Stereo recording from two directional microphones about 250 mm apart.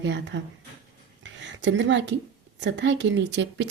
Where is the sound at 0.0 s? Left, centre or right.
Right.